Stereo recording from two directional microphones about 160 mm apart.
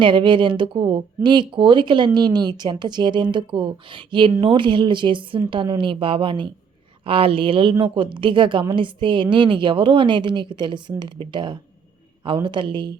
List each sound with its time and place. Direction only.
0.0 s a woman's voice: 30° right (ahead or behind)